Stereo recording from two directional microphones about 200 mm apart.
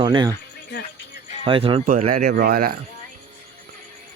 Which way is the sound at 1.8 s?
45° right (ahead or behind).